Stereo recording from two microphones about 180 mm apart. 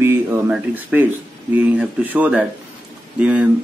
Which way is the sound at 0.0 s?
10° right (ahead or behind).